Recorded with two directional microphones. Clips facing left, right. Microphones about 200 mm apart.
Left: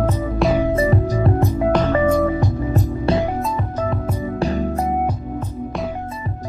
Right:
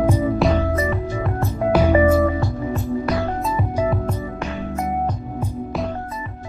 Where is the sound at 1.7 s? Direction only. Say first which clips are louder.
Right 3 dB; 10° right (ahead or behind).